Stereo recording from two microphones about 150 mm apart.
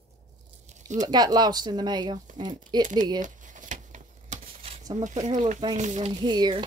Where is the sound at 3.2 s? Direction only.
60° right (ahead or behind).